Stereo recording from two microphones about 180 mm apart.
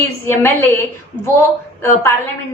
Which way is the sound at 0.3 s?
15° left (ahead or behind).